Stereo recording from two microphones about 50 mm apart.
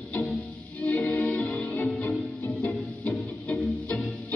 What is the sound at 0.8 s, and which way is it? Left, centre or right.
Music, left.